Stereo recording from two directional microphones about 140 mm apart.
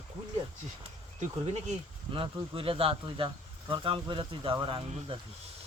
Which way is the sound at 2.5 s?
40° right (ahead or behind).